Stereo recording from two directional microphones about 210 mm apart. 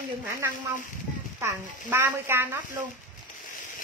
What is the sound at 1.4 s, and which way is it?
Speech, 10° right (ahead or behind).